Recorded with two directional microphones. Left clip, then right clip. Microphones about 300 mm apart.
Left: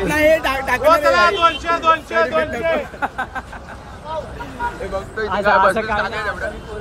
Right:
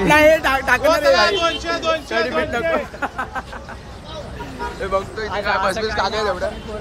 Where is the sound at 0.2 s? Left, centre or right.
Centre.